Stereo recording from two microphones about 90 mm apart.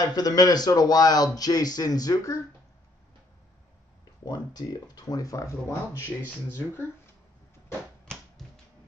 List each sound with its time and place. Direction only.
0.0 s speech: 45° left (ahead or behind)
4.6 s speech: 45° left (ahead or behind)
6.2 s speech: 25° left (ahead or behind)